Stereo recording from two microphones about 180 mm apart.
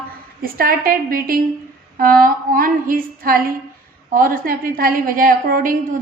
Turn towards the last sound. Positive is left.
turn(degrees=-50)  # may be behind; listen again after turning